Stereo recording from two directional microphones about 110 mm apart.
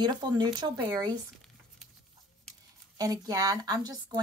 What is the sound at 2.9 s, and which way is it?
Speech, 35° right (ahead or behind).